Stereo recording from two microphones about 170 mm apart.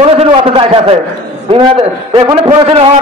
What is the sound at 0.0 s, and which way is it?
Speech, 35° right (ahead or behind).